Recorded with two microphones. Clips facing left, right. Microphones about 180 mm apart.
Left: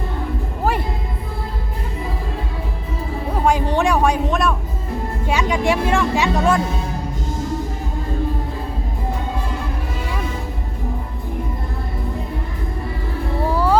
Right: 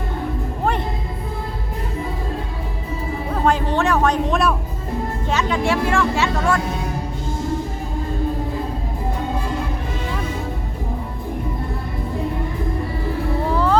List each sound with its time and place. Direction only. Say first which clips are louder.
3.4 s a sound: left 1 dB; 15° left (ahead or behind)
4.3 s music: right 1 dB; centre (ahead or behind)
5.2 s music: left 2 dB; 10° left (ahead or behind)